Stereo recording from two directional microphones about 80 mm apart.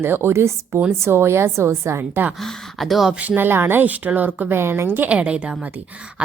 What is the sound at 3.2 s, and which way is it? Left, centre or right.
A woman's voice, right.